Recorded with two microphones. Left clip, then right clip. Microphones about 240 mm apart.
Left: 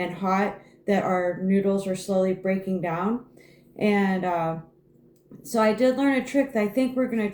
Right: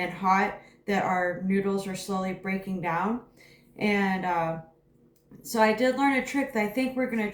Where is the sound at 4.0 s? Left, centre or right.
Left.